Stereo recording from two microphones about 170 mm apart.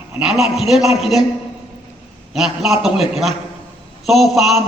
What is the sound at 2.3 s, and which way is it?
Speech, centre (ahead or behind).